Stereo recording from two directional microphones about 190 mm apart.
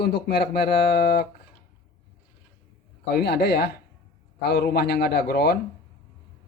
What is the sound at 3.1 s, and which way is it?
Speech, 55° left (ahead or behind).